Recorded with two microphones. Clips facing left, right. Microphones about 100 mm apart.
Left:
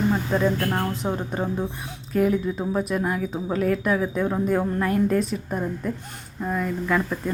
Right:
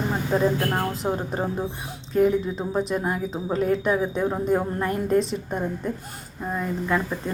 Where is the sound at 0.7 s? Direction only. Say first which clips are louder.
Even; 15° right (ahead or behind).